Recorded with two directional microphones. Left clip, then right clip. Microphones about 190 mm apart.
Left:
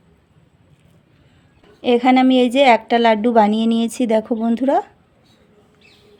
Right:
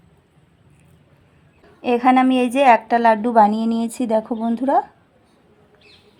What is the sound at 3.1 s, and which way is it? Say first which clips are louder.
Speech: even; 25° left (ahead or behind).